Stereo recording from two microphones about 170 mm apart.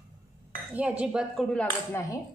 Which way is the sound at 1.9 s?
20° left (ahead or behind).